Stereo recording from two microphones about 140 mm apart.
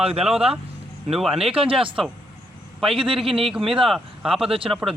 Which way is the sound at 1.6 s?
40° right (ahead or behind).